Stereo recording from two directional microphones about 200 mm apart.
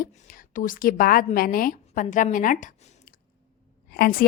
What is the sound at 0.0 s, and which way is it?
A woman's voice, 45° left (ahead or behind).